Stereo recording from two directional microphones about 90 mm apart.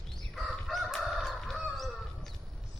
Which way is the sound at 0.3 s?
Centre (ahead or behind).